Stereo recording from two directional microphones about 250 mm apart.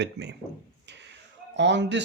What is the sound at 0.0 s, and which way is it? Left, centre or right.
Speech, right.